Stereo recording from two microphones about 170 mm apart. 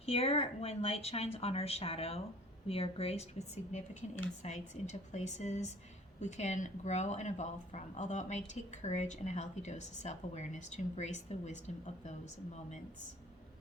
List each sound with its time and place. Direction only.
0.0 s a woman's voice: 35° left (ahead or behind)